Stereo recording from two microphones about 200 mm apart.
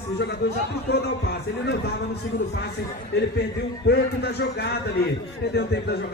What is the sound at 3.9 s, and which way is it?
Speech, 55° left (ahead or behind).